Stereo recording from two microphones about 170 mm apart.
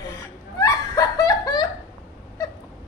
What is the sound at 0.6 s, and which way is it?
Snicker, 20° left (ahead or behind).